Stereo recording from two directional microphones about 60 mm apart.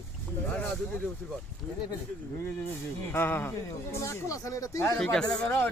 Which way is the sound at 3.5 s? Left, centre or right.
Left.